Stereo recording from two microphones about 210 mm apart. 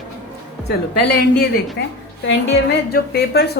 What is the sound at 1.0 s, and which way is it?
A woman's voice, 55° left (ahead or behind).